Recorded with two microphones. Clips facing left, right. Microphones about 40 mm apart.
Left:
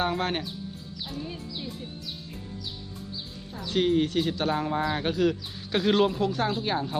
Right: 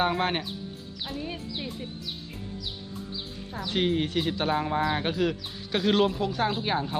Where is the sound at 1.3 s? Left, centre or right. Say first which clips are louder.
Right 2 dB; right.